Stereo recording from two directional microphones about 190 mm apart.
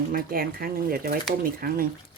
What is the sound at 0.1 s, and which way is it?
Speech, 50° right (ahead or behind).